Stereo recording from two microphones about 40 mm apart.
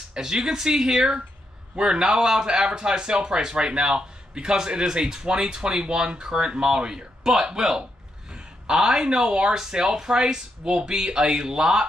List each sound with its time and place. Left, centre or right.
0.1 s speech: centre